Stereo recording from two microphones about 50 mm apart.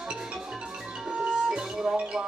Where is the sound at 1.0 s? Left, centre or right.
Centre.